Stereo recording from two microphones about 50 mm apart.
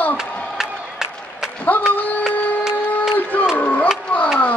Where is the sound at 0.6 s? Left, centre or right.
Centre.